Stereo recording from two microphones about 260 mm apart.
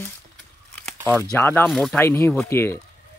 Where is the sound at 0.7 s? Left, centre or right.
Centre.